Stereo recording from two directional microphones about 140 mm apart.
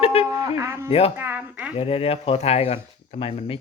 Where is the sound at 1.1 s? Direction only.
15° right (ahead or behind).